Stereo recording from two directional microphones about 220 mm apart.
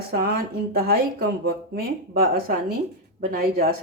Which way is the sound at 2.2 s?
45° right (ahead or behind).